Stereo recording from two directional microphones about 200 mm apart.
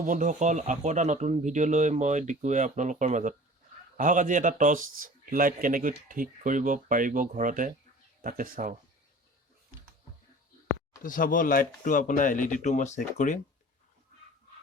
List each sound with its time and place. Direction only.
0.0 s speech: 40° right (ahead or behind)
10.7 s speech: 40° left (ahead or behind)